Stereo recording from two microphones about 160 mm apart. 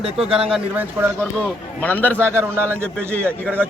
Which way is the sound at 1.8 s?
10° left (ahead or behind).